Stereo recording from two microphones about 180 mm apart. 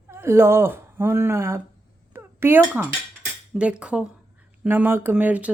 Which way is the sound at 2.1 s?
10° right (ahead or behind).